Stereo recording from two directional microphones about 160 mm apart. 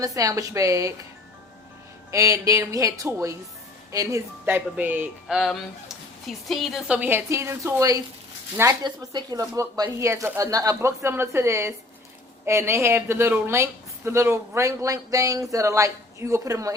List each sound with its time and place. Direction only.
0.0 s speech: 20° right (ahead or behind)
2.0 s speech: 20° right (ahead or behind)